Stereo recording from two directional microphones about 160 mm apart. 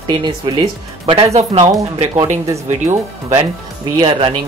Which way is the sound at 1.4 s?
40° right (ahead or behind).